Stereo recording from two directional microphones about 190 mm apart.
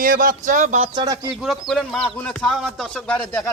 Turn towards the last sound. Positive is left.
turn(degrees=10)  # may be behind; listen again after turning